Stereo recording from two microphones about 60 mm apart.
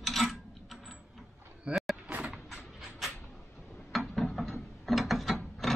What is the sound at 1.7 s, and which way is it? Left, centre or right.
Vehicle, centre.